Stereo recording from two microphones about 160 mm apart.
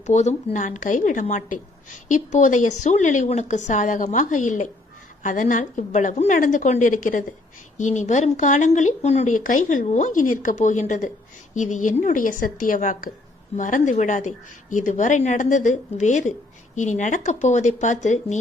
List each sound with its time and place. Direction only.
0.0 s a woman's voice: 45° left (ahead or behind)